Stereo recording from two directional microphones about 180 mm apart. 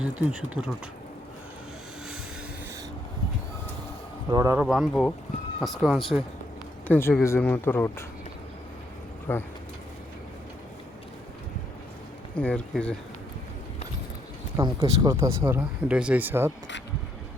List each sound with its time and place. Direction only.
0.0 s speech: 5° right (ahead or behind)
4.3 s speech: 20° right (ahead or behind)
4.6 s speech: centre (ahead or behind); by 8.0 s 15° left (ahead or behind)
9.3 s speech: 10° left (ahead or behind)
12.4 s speech: 5° left (ahead or behind)
14.5 s speech: 20° right (ahead or behind)